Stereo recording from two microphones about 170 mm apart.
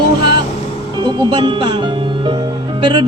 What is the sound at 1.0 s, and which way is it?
Speech, 25° right (ahead or behind).